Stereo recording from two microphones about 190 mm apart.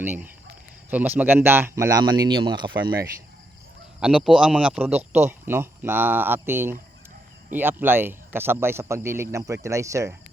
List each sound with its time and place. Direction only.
0.9 s speech: 10° right (ahead or behind)
4.0 s speech: 5° right (ahead or behind)